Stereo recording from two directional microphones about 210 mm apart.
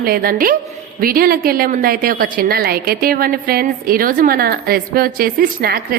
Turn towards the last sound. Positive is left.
turn(degrees=-45)  # may be behind; listen again after turning